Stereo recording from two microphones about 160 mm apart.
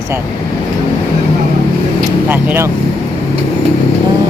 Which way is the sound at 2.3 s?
10° right (ahead or behind).